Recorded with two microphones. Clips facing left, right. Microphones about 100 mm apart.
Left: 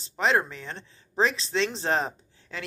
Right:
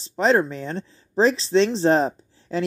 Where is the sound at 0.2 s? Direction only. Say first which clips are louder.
Right 6 dB; 35° right (ahead or behind).